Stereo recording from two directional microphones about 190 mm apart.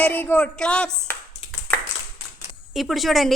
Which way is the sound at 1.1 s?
10° left (ahead or behind).